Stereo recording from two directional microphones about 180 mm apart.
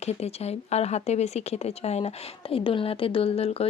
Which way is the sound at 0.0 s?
35° left (ahead or behind).